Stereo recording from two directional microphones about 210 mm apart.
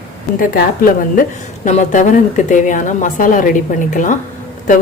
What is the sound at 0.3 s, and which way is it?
A woman's voice, 40° left (ahead or behind).